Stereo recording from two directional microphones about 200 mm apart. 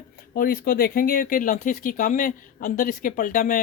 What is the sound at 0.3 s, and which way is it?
Speech, 45° left (ahead or behind).